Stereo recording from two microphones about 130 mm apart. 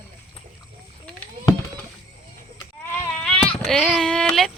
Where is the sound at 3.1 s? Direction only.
5° left (ahead or behind).